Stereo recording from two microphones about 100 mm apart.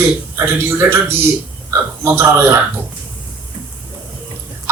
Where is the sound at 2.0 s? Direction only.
25° right (ahead or behind).